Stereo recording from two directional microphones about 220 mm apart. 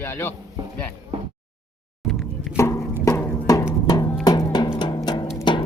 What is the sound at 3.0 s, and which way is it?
Music, 10° left (ahead or behind).